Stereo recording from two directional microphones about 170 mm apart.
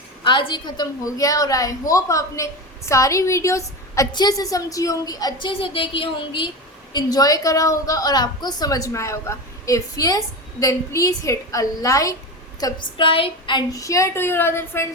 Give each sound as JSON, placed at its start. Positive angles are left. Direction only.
{"t": 0.3, "sound": "a woman's voice", "side_deg": 25}